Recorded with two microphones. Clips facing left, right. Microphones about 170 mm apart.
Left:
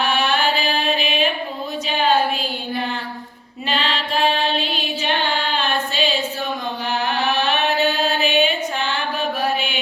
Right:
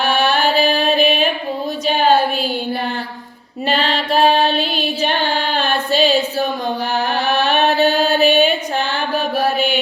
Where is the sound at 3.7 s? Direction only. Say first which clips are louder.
Right 5 dB; 40° right (ahead or behind).